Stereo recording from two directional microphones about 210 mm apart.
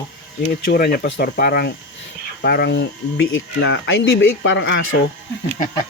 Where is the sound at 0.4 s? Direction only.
50° left (ahead or behind); by 4.9 s 65° left (ahead or behind).